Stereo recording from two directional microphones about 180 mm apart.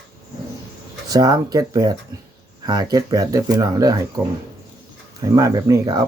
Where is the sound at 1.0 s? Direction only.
20° right (ahead or behind).